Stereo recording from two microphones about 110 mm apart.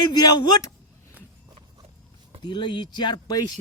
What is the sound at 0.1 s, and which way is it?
Speech, 40° left (ahead or behind).